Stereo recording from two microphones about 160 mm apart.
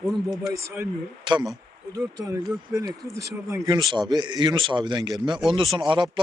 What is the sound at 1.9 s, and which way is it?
A man's voice, 25° right (ahead or behind).